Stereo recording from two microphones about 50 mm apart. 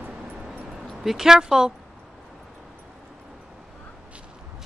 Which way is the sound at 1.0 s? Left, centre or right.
Centre.